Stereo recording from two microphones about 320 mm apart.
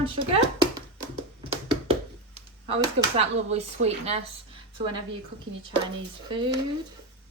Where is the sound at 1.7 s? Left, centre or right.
Centre.